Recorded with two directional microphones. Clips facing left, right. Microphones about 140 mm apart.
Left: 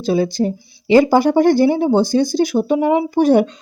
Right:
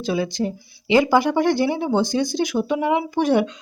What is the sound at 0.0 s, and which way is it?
Speech, 35° left (ahead or behind).